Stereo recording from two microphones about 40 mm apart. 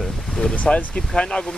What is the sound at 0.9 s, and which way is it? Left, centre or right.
Speech, left.